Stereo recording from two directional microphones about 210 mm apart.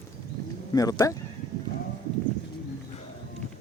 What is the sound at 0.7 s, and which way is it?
Speech, 15° left (ahead or behind).